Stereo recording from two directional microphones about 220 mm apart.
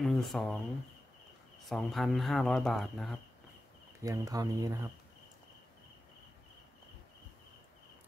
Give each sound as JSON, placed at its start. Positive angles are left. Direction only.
{"t": 0.0, "sound": "speech", "side_deg": 0}
{"t": 1.7, "sound": "speech", "side_deg": 0}
{"t": 4.0, "sound": "speech", "side_deg": -15}